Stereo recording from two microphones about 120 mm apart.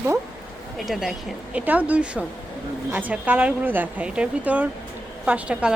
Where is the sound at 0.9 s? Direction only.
Centre (ahead or behind).